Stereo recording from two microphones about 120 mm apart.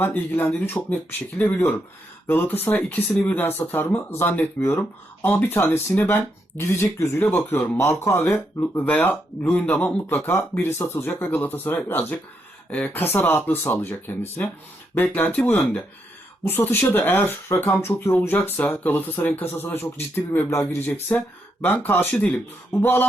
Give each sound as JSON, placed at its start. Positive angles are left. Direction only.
{"t": 0.0, "sound": "speech", "side_deg": 20}